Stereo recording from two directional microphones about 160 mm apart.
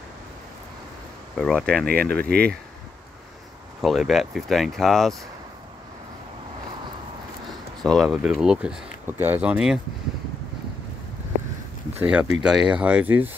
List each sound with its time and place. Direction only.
1.3 s speech: 5° left (ahead or behind)
2.2 s speech: 80° right
3.8 s speech: centre (ahead or behind)
7.8 s speech: 5° left (ahead or behind)
12.0 s speech: 10° right (ahead or behind)